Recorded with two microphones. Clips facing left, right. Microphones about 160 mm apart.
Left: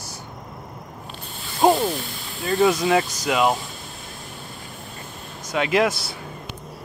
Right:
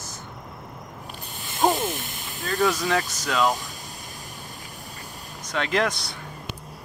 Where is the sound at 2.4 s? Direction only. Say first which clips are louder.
Left 5 dB; 15° left (ahead or behind).